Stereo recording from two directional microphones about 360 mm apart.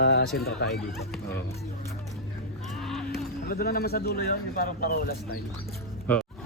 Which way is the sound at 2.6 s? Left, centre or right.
Centre.